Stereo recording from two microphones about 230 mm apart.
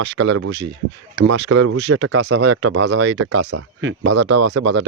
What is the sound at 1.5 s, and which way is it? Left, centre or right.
Speech, right.